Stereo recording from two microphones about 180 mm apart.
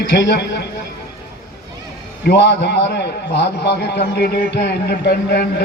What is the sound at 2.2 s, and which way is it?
A man's voice, 70° left (ahead or behind).